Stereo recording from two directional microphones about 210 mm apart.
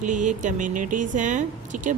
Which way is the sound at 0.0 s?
35° right (ahead or behind).